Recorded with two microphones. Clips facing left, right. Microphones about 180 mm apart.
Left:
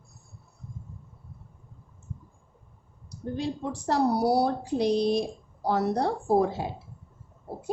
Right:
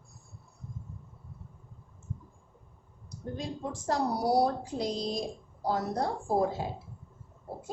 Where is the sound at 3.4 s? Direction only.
70° left (ahead or behind).